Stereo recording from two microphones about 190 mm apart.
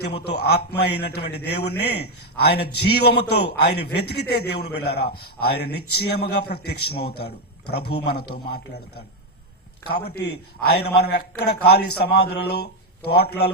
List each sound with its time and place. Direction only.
0.0 s a man's voice: 60° left (ahead or behind)